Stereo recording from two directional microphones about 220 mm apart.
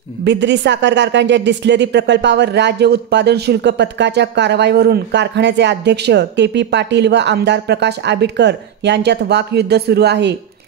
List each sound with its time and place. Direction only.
0.2 s speech: 50° right (ahead or behind)